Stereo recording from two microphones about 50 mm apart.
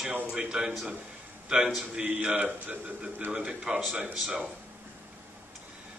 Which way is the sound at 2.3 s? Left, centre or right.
Right.